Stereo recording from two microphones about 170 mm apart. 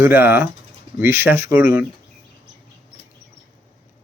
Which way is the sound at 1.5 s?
55° left (ahead or behind).